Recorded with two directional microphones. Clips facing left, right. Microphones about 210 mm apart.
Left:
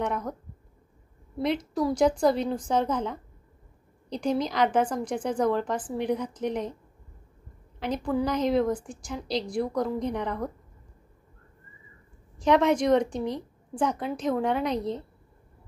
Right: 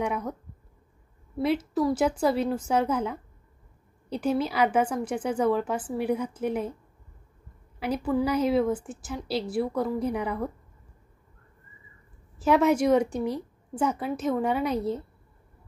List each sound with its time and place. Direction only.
0.0 s a woman's voice: 10° right (ahead or behind)
1.4 s a woman's voice: 5° right (ahead or behind)
7.8 s a woman's voice: 5° right (ahead or behind)
12.4 s a woman's voice: 5° right (ahead or behind)